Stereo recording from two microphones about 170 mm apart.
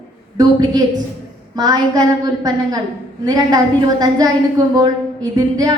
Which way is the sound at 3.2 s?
20° right (ahead or behind).